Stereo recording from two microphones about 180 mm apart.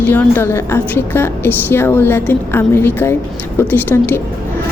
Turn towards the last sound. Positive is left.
turn(degrees=10)  # may be behind; listen again after turning